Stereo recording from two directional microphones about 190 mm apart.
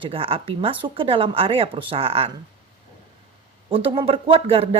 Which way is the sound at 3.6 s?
30° right (ahead or behind).